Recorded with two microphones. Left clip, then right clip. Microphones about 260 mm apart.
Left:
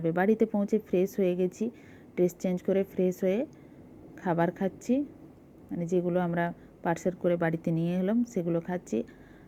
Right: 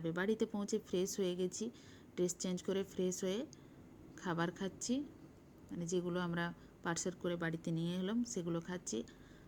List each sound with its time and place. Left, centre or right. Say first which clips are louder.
0.0 s a woman's voice: left 12 dB; centre